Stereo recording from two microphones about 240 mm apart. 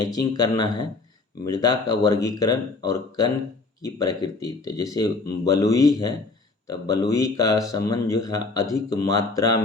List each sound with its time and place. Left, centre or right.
0.0 s a man's voice: centre